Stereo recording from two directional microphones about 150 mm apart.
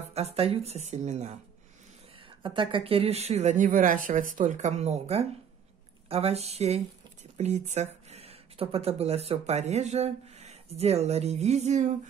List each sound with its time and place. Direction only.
0.1 s speech: 45° right (ahead or behind)
2.4 s speech: 35° right (ahead or behind); by 11.9 s 50° right (ahead or behind)